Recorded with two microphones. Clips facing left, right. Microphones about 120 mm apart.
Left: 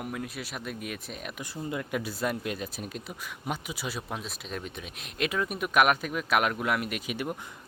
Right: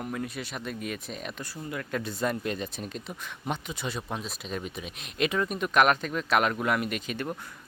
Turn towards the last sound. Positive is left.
turn(degrees=10)  # may be behind; listen again after turning